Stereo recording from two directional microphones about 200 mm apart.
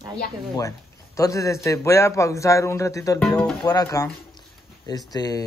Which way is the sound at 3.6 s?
20° left (ahead or behind).